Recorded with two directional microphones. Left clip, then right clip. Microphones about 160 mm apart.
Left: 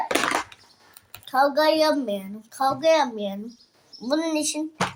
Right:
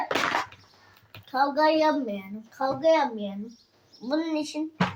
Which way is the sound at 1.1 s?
50° left (ahead or behind).